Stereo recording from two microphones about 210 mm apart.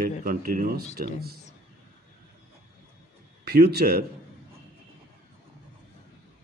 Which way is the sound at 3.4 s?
45° right (ahead or behind).